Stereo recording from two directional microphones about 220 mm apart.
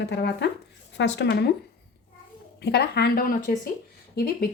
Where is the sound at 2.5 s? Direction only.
50° left (ahead or behind).